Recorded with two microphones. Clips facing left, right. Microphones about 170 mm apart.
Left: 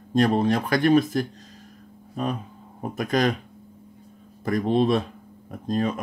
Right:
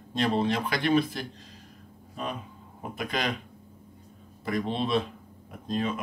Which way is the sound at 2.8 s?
45° left (ahead or behind).